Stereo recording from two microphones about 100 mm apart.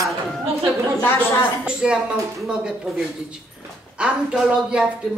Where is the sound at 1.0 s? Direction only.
25° left (ahead or behind).